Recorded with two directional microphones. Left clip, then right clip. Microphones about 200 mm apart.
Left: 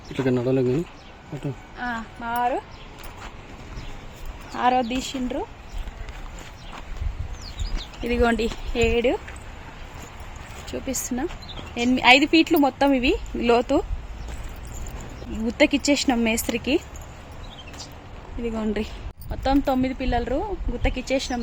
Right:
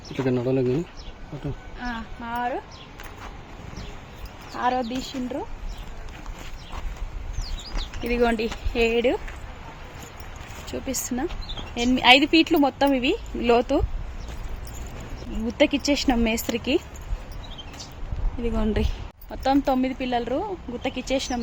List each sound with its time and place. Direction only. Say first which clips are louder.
0.2 s a woman's voice: left 1 dB; 10° left (ahead or behind)
1.8 s speech: left 4 dB; 25° left (ahead or behind)
4.5 s speech: left 4 dB; 40° left (ahead or behind)
8.0 s a woman's voice: left 1 dB; 10° left (ahead or behind)
10.7 s a woman's voice: left 1 dB; 5° left (ahead or behind)
15.5 s a woman's voice: left 1 dB; 15° left (ahead or behind)
18.4 s speech: right 1 dB; 10° right (ahead or behind)
19.3 s speech: even; centre (ahead or behind)